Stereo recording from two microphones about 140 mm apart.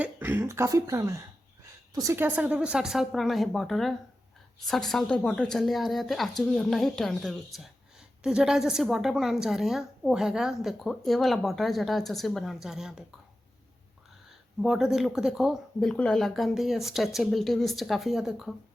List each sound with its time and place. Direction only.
0.0 s a woman's voice: 15° right (ahead or behind)
14.6 s a woman's voice: 5° right (ahead or behind)